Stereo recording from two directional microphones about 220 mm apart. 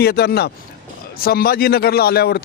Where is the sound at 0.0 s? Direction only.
45° left (ahead or behind).